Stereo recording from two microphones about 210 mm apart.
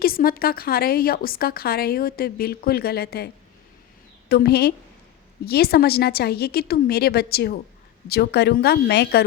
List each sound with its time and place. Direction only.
0.0 s speech: 45° left (ahead or behind)
4.3 s speech: 50° left (ahead or behind)